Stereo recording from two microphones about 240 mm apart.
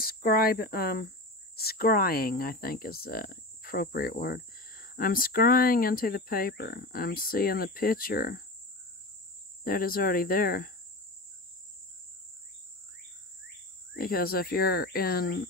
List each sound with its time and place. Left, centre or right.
0.0 s speech: left
9.7 s speech: left
13.9 s speech: left